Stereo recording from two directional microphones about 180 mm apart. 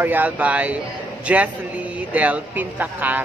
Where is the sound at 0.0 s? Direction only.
10° right (ahead or behind).